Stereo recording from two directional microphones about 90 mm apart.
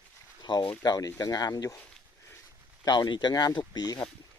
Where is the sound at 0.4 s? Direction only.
60° left (ahead or behind).